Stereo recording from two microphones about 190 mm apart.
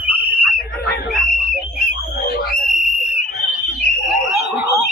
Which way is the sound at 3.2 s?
60° left (ahead or behind).